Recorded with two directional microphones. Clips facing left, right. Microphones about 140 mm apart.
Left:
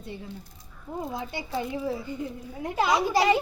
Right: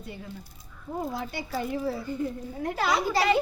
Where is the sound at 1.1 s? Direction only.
20° left (ahead or behind).